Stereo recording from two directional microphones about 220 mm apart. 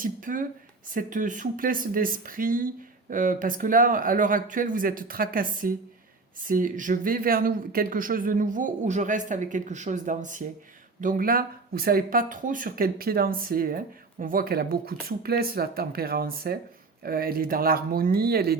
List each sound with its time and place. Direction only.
0.0 s speech: 40° right (ahead or behind)